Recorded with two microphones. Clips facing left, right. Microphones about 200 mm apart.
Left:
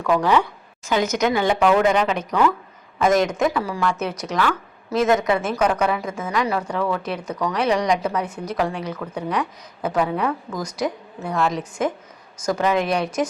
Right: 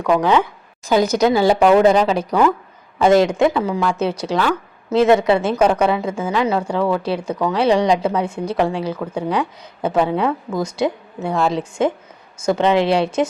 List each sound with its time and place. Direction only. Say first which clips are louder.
0.0 s a woman's voice: right 3 dB; 20° right (ahead or behind)
0.9 s a woman's voice: right 5 dB; 35° right (ahead or behind)